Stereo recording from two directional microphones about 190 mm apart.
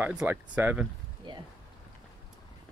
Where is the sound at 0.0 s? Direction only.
5° right (ahead or behind).